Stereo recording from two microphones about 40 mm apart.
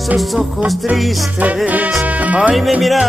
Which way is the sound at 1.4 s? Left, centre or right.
Right.